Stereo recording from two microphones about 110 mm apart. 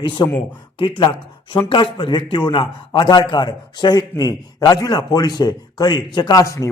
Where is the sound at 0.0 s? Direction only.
50° left (ahead or behind).